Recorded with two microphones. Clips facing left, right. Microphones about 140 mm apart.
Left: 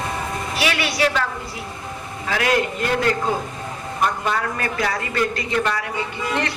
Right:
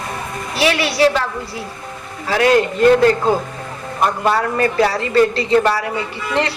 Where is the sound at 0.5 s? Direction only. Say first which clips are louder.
Right 7 dB; 35° right (ahead or behind).